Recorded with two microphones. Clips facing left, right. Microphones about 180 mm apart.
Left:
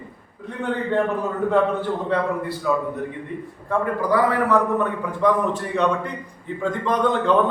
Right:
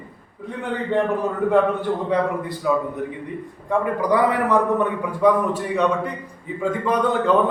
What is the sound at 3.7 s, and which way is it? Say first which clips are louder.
A man's voice: right 1 dB; 15° right (ahead or behind).